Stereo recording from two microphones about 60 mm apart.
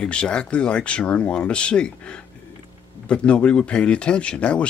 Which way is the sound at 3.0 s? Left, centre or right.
Centre.